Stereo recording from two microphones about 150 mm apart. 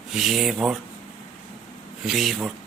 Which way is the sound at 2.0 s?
Centre (ahead or behind).